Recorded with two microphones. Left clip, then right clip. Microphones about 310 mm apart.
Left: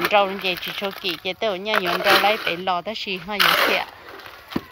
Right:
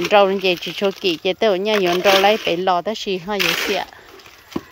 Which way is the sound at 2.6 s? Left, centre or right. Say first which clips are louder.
Right 5 dB; right.